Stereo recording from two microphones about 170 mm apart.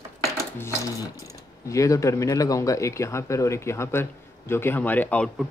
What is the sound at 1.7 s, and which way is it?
Speech, 20° left (ahead or behind).